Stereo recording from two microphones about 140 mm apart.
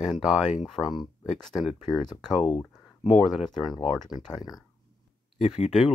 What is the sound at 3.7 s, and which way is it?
Speech, 30° left (ahead or behind).